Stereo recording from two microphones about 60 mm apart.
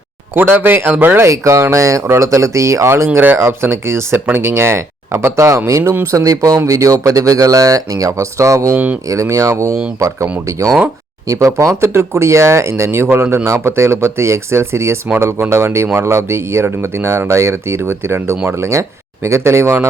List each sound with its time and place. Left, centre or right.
0.3 s speech: right
1.3 s speech: right
6.1 s speech: right
8.7 s speech: right
9.3 s speech: right